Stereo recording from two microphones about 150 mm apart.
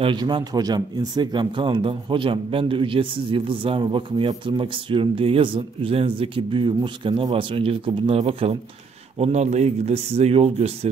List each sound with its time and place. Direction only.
0.0 s speech: 30° right (ahead or behind)